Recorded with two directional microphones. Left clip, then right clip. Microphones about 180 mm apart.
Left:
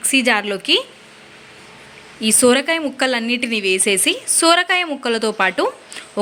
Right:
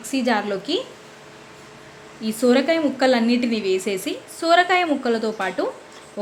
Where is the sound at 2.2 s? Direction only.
20° left (ahead or behind).